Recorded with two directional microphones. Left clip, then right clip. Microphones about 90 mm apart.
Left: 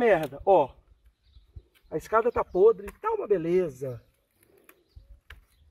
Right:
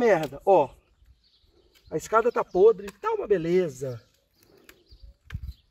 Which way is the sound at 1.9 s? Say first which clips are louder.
Right 2 dB; 25° right (ahead or behind).